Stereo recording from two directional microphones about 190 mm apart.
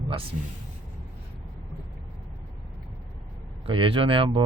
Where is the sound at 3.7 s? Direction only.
25° right (ahead or behind).